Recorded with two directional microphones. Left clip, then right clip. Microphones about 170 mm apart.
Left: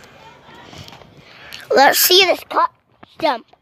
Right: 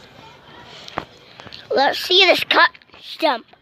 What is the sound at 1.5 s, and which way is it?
Speech, 20° left (ahead or behind).